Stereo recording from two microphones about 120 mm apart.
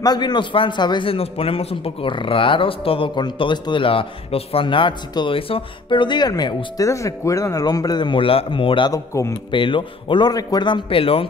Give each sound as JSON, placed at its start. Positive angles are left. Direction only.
{"t": 0.0, "sound": "a man's voice", "side_deg": 35}
{"t": 8.9, "sound": "a man's voice", "side_deg": 25}
{"t": 9.5, "sound": "a man's voice", "side_deg": 45}